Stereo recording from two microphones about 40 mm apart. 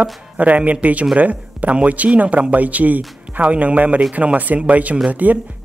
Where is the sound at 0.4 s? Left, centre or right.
Right.